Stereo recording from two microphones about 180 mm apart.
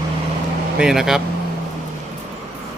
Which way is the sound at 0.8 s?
5° right (ahead or behind).